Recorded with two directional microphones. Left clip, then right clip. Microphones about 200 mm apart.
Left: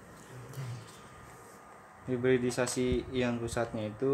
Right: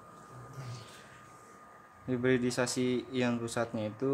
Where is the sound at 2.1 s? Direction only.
20° right (ahead or behind).